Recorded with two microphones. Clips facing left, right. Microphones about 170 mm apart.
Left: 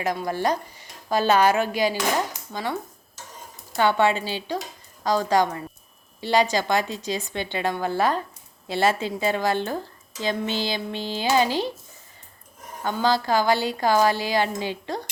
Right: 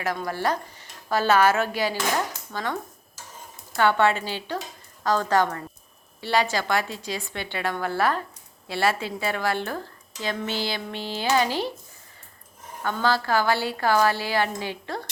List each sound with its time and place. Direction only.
0.0 s speech: 15° left (ahead or behind)
3.8 s a woman's voice: 15° left (ahead or behind)
12.8 s a woman's voice: 15° left (ahead or behind)